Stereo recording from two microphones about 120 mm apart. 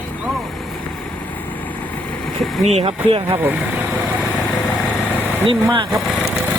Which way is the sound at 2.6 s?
65° right (ahead or behind).